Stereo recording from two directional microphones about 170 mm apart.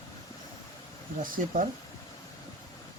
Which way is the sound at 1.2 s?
55° right (ahead or behind).